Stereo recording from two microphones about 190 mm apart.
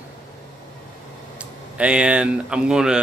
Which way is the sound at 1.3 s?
5° right (ahead or behind).